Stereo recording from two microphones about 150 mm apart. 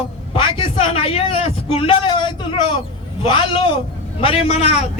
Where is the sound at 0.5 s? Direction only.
35° left (ahead or behind).